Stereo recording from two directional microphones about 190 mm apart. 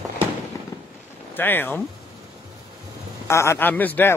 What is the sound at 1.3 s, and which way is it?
Speech, 10° left (ahead or behind).